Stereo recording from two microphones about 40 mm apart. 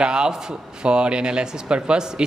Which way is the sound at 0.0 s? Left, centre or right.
Centre.